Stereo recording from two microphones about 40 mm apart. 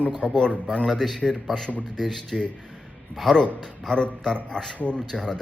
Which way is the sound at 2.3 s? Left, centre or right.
Centre.